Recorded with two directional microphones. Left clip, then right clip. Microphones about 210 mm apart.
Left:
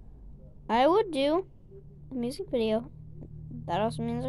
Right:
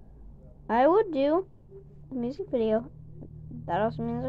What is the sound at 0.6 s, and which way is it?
A woman's voice, 30° left (ahead or behind).